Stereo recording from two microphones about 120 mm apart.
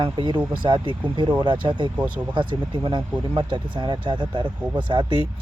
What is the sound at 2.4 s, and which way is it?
Speech, 40° right (ahead or behind).